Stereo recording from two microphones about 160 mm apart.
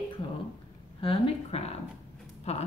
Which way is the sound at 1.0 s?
35° left (ahead or behind).